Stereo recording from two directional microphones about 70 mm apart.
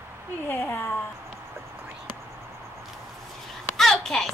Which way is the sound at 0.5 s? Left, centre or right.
Left.